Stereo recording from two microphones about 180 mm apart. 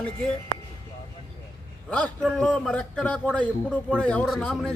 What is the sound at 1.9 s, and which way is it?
A man's voice, 5° left (ahead or behind).